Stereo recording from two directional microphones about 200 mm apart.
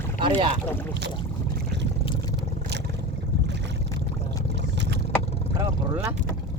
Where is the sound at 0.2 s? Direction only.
25° right (ahead or behind).